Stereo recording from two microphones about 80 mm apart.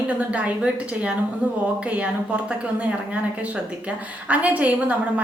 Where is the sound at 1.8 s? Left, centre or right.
Centre.